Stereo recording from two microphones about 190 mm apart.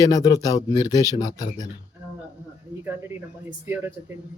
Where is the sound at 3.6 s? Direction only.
10° right (ahead or behind).